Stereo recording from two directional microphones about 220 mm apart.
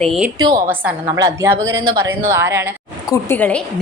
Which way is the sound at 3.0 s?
10° left (ahead or behind).